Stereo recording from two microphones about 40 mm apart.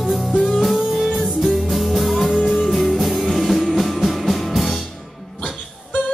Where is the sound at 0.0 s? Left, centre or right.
Centre.